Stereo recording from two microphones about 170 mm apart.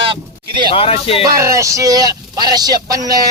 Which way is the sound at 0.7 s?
35° left (ahead or behind).